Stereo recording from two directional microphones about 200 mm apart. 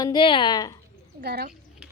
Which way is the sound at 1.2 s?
50° right (ahead or behind).